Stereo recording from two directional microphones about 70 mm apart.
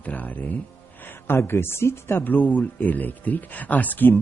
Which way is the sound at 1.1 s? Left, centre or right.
Left.